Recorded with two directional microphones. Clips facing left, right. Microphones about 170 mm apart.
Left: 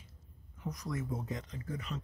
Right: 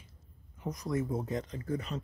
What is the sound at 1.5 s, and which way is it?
Speech, 40° right (ahead or behind).